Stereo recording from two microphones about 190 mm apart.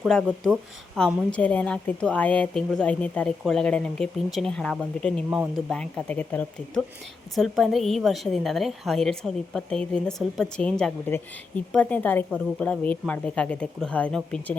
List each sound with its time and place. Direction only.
0.0 s a woman's voice: 5° left (ahead or behind)